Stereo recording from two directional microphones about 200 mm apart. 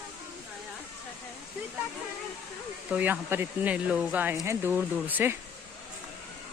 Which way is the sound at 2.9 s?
10° right (ahead or behind).